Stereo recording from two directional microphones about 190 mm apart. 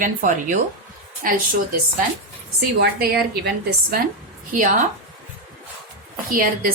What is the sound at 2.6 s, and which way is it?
Speech, 55° right (ahead or behind).